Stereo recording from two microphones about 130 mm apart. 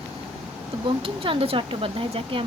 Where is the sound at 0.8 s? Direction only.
45° right (ahead or behind).